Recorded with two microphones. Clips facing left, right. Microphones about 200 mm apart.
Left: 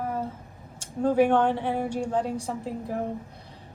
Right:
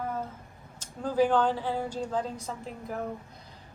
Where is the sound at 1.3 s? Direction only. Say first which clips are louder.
Left 3 dB; 25° left (ahead or behind).